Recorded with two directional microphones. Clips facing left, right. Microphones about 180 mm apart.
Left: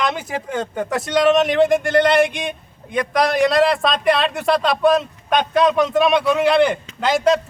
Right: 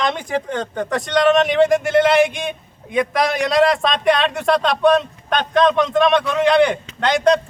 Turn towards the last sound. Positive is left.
turn(degrees=5)  # may be behind; listen again after turning